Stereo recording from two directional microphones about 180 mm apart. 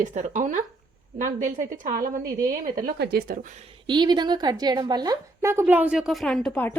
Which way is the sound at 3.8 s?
25° right (ahead or behind).